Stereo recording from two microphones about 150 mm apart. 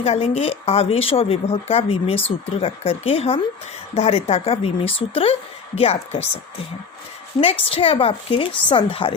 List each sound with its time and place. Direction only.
0.0 s speech: 45° left (ahead or behind)
7.3 s speech: 35° left (ahead or behind)